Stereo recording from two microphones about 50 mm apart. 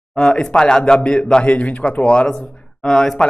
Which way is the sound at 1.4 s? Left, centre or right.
Left.